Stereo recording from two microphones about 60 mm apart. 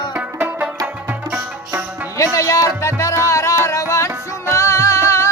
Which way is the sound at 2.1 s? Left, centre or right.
Left.